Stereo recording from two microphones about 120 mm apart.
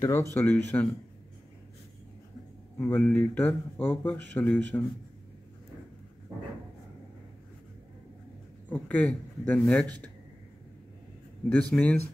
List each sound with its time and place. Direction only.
0.0 s speech: 20° left (ahead or behind)
2.8 s speech: 15° left (ahead or behind)
8.6 s speech: 10° left (ahead or behind)
11.4 s speech: 10° left (ahead or behind)